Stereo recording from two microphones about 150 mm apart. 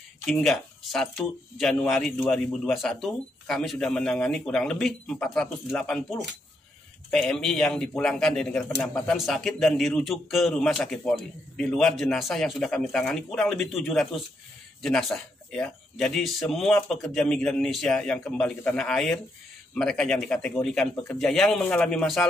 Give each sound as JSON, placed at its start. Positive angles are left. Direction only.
{"t": 0.3, "sound": "a man's voice", "side_deg": 0}